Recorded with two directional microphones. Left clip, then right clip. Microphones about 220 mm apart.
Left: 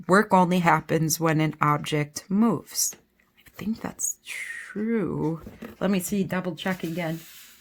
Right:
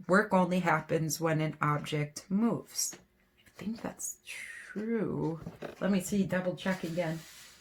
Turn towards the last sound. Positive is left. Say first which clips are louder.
# left 4 dB
turn(degrees=55)  # may be behind; listen again after turning